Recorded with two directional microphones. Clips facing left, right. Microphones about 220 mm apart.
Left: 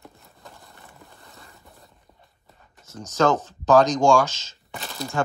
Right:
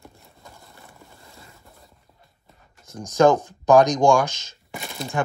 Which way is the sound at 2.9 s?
15° right (ahead or behind).